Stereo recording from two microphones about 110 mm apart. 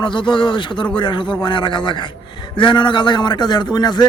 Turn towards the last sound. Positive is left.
turn(degrees=40)  # may be behind; listen again after turning